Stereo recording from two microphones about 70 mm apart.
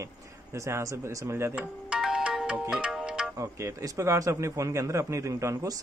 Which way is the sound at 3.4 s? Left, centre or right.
Right.